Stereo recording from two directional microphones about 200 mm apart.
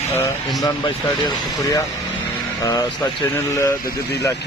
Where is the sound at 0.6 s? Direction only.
20° left (ahead or behind).